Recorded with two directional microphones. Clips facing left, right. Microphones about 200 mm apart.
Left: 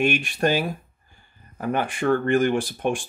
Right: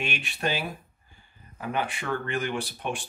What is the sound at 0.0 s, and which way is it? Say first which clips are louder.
Speech: left 9 dB; 45° left (ahead or behind).